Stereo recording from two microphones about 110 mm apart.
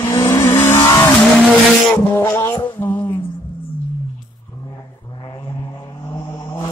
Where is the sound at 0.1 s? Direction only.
25° left (ahead or behind).